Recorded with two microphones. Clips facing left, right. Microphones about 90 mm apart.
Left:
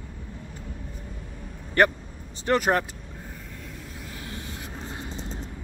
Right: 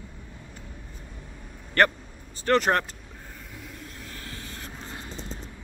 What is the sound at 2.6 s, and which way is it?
Vehicle, 10° left (ahead or behind).